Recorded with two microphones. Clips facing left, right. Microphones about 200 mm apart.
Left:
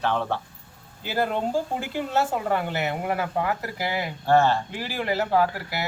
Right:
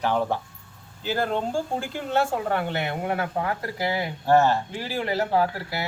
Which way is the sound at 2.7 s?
5° left (ahead or behind).